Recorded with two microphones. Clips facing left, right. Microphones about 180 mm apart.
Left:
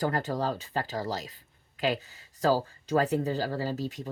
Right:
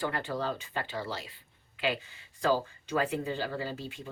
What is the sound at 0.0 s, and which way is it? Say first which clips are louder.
Speech: left 4 dB; 40° left (ahead or behind).